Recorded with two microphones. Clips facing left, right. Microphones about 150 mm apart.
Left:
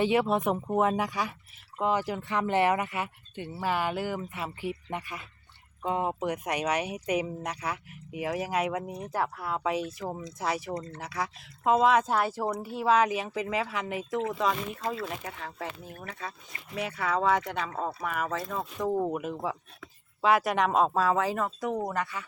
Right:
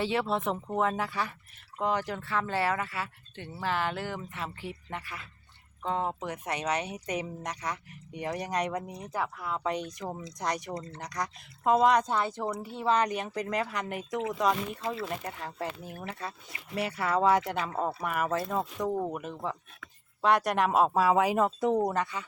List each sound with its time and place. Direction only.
0.0 s speech: 15° left (ahead or behind); by 22.2 s 20° right (ahead or behind)